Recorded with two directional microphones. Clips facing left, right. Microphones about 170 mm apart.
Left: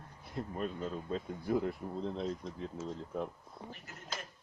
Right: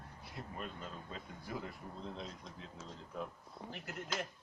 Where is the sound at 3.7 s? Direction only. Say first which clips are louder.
Right 4 dB; 65° right (ahead or behind).